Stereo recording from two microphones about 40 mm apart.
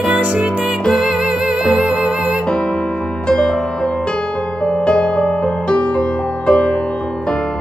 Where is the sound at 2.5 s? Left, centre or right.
Left.